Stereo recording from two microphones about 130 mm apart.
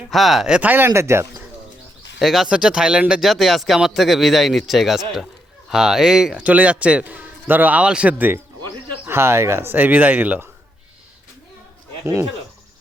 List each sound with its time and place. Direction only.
0.1 s a man's voice: centre (ahead or behind); by 1.5 s 20° right (ahead or behind)
2.1 s a man's voice: centre (ahead or behind)